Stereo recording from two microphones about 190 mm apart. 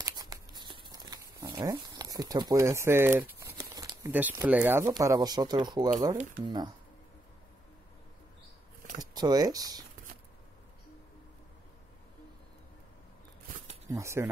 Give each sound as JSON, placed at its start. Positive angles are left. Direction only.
{"t": 0.0, "sound": "crumpling", "side_deg": -20}
{"t": 4.1, "sound": "speech", "side_deg": -10}
{"t": 9.1, "sound": "speech", "side_deg": -20}
{"t": 13.8, "sound": "speech", "side_deg": -15}